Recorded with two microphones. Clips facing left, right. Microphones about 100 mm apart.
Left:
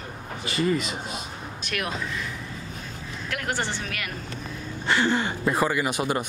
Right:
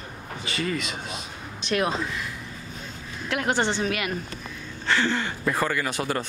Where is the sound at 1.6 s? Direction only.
30° right (ahead or behind).